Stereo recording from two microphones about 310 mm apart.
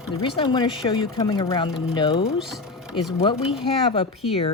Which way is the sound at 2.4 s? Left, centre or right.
Centre.